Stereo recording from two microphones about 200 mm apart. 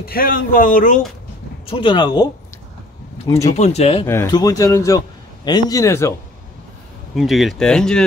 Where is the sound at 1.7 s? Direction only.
25° left (ahead or behind).